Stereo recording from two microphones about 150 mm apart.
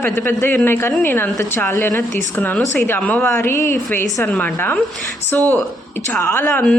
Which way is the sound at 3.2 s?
15° left (ahead or behind).